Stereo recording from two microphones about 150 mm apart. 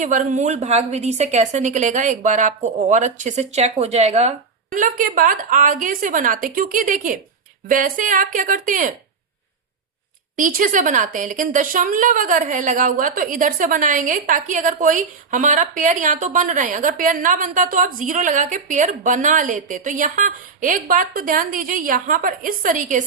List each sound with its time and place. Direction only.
0.0 s speech: 55° right (ahead or behind)
10.3 s speech: 60° right (ahead or behind)